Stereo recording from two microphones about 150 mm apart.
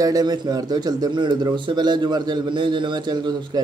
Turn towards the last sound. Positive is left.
turn(degrees=-30)  # may be behind; listen again after turning